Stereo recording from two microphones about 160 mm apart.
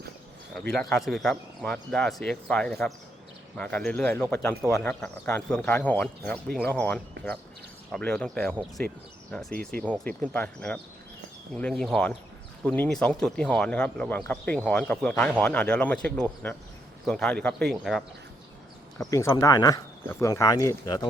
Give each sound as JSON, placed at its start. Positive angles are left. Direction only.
{"t": 0.7, "sound": "a man's voice", "side_deg": 5}
{"t": 9.7, "sound": "a man's voice", "side_deg": 5}
{"t": 19.1, "sound": "speech", "side_deg": 20}